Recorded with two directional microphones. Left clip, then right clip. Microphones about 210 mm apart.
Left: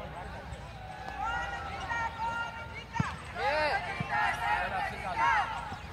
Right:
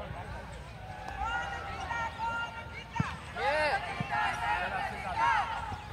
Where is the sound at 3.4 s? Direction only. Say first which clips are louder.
Even; 25° right (ahead or behind).